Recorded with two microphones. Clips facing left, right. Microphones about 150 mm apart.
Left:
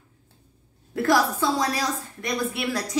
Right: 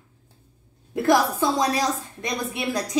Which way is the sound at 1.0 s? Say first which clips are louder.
Right 2 dB; 20° right (ahead or behind).